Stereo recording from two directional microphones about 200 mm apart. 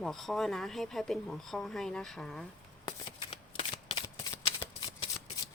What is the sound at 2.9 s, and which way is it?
Shuffling cards, 25° left (ahead or behind).